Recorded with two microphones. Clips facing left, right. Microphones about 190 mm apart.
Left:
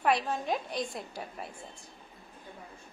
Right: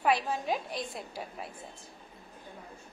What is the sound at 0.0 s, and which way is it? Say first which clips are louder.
A woman's voice: even; centre (ahead or behind).